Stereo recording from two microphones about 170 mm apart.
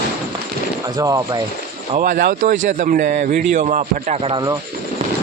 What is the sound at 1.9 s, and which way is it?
A man's voice, 50° right (ahead or behind).